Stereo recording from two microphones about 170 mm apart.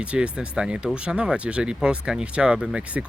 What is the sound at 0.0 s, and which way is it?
Speech, 5° right (ahead or behind).